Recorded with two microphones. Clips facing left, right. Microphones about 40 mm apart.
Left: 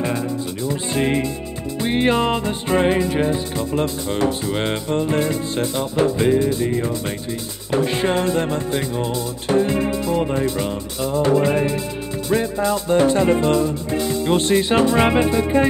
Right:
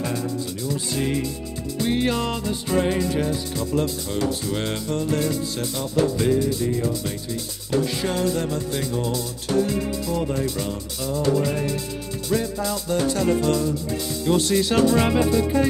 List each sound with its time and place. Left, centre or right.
0.7 s music: left